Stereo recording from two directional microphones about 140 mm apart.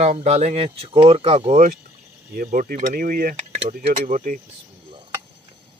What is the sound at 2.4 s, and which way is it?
Speech, 85° right.